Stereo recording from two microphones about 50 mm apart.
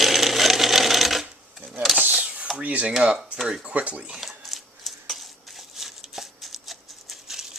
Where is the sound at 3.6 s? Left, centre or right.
Right.